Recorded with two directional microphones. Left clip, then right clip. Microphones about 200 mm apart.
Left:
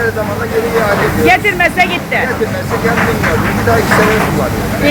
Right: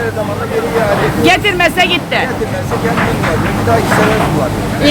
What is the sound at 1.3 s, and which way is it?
Speech, 15° right (ahead or behind).